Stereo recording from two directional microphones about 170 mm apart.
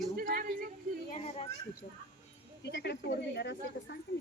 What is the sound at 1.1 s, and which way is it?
Speech, 40° left (ahead or behind).